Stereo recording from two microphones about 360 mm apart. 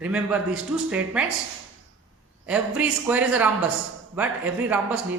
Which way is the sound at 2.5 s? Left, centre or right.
Centre.